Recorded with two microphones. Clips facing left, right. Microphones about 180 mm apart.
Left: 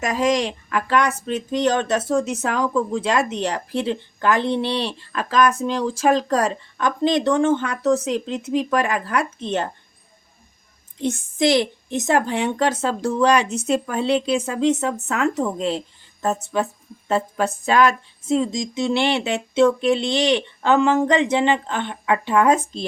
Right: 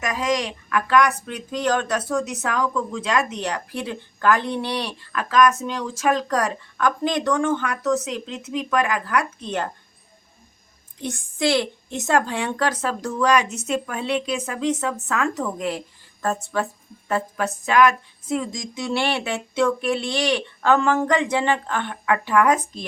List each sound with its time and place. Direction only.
0.0 s speech: 30° left (ahead or behind)
11.0 s speech: 20° left (ahead or behind)